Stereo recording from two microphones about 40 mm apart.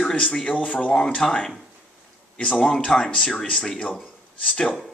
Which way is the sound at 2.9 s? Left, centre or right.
Centre.